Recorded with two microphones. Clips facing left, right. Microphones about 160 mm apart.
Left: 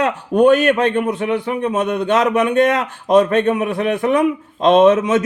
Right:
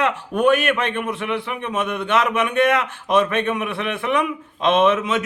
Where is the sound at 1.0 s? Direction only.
40° left (ahead or behind).